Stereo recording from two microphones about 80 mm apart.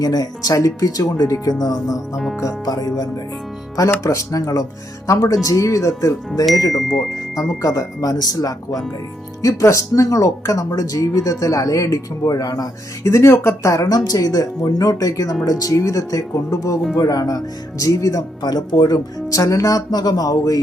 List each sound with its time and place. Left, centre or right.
0.0 s speech: left
6.7 s speech: centre
7.3 s speech: left
13.1 s speech: left
13.8 s speech: left